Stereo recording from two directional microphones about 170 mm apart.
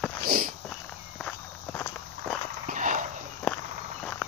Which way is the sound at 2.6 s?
50° right (ahead or behind).